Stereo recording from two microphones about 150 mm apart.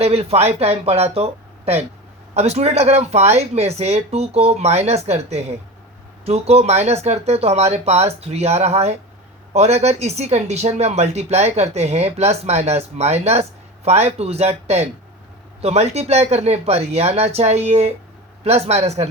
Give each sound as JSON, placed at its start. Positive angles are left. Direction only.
{"t": 0.0, "sound": "speech", "side_deg": -45}